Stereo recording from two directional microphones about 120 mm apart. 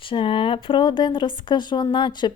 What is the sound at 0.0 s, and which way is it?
Speech, 45° left (ahead or behind).